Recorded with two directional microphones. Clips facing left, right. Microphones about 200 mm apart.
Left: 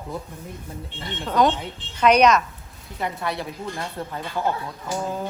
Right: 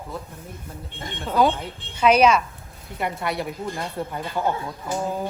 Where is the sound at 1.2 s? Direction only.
5° right (ahead or behind).